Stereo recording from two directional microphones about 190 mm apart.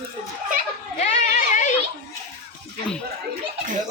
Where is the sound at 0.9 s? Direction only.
40° left (ahead or behind).